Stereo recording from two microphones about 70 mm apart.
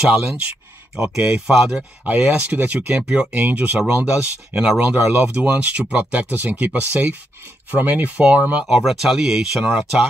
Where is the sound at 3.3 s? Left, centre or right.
Right.